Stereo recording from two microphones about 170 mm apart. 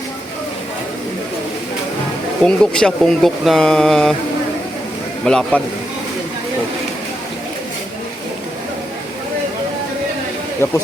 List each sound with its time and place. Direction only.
2.4 s speech: 5° left (ahead or behind)
5.2 s speech: 5° left (ahead or behind)
10.6 s speech: 15° left (ahead or behind)